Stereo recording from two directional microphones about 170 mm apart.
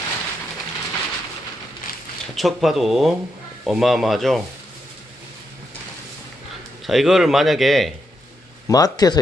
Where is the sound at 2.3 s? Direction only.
Centre (ahead or behind).